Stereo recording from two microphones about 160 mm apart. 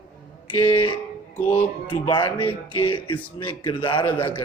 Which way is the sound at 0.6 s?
30° left (ahead or behind).